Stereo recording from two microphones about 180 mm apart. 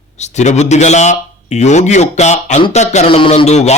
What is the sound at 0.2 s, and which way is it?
Speech, 40° left (ahead or behind).